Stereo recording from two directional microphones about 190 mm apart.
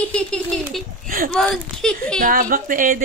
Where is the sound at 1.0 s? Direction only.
50° right (ahead or behind).